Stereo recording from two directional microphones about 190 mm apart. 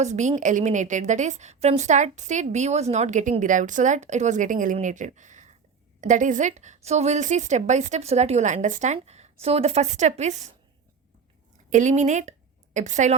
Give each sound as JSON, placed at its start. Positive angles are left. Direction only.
{"t": 0.0, "sound": "a woman's voice", "side_deg": -40}
{"t": 11.7, "sound": "a woman's voice", "side_deg": -40}